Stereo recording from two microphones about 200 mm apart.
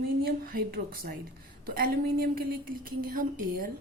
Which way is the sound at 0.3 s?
45° right (ahead or behind).